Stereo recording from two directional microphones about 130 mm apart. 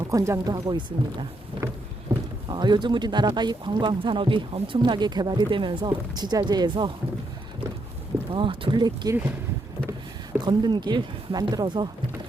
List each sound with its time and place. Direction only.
0.1 s speech: 25° right (ahead or behind)
2.1 s a sound: 20° right (ahead or behind)
2.5 s speech: 35° right (ahead or behind)
8.3 s speech: 40° right (ahead or behind)
10.4 s speech: 35° right (ahead or behind)